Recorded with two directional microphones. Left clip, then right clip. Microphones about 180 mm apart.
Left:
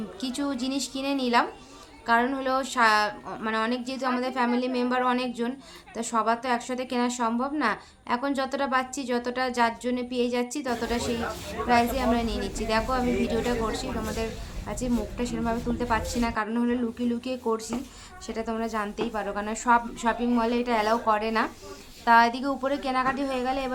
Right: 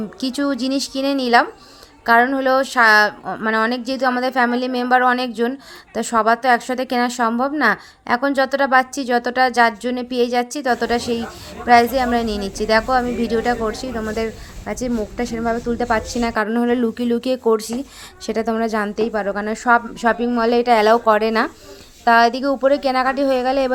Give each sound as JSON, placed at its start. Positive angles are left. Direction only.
{"t": 0.2, "sound": "a woman's voice", "side_deg": -40}